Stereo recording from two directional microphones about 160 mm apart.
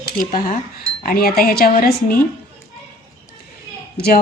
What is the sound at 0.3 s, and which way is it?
Speech, 55° left (ahead or behind).